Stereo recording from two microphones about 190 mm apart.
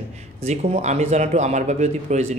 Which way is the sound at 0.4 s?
35° right (ahead or behind).